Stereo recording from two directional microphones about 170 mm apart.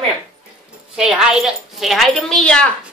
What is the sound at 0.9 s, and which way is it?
A woman's voice, 5° right (ahead or behind).